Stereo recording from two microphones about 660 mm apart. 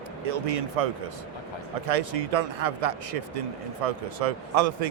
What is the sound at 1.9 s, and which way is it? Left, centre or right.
A man's voice, right.